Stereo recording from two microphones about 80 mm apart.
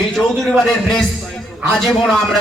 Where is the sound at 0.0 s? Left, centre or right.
Centre.